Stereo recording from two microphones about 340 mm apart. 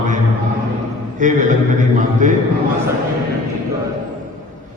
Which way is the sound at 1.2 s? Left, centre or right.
Right.